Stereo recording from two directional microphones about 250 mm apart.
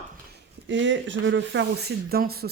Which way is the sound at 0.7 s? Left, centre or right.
Right.